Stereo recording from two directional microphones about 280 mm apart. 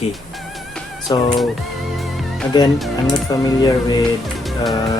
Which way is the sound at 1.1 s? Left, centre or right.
Centre.